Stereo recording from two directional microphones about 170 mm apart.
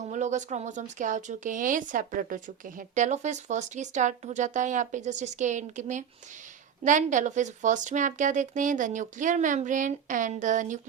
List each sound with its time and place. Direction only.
0.0 s speech: 45° right (ahead or behind)